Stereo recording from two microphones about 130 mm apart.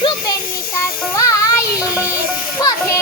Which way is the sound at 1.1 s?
25° left (ahead or behind).